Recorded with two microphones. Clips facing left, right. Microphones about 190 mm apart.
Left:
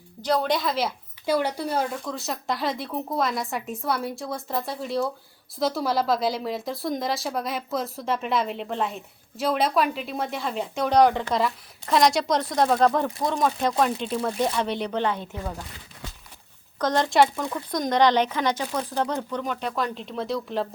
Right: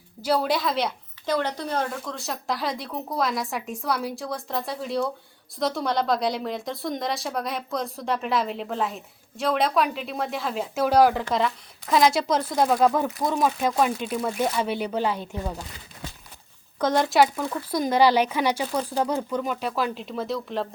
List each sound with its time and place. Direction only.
0.2 s a woman's voice: 5° right (ahead or behind)
16.7 s a woman's voice: 10° right (ahead or behind)